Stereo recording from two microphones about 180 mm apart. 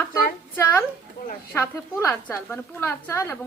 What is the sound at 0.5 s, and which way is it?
Speech, 10° left (ahead or behind).